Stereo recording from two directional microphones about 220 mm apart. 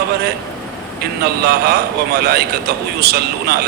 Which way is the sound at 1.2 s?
45° right (ahead or behind).